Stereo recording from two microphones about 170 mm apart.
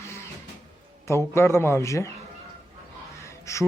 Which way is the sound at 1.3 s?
15° left (ahead or behind).